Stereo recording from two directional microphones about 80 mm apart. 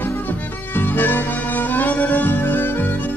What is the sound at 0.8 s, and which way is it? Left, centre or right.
Music, left.